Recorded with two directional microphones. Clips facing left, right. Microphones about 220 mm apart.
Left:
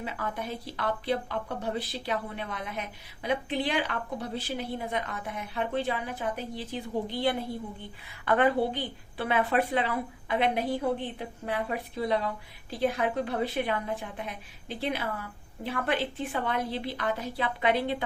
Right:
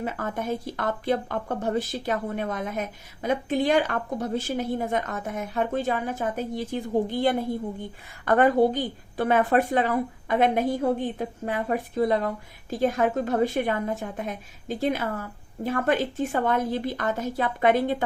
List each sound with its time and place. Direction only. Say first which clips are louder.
0.0 s speech: right 5 dB; 45° right (ahead or behind)